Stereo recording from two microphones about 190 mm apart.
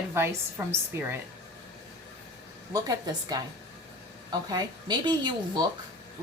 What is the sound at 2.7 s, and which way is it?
Speech, 20° right (ahead or behind).